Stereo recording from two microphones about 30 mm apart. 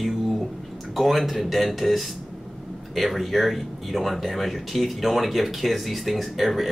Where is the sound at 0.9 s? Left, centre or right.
Centre.